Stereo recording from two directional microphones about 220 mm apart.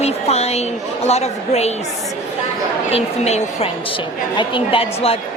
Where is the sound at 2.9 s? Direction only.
30° left (ahead or behind).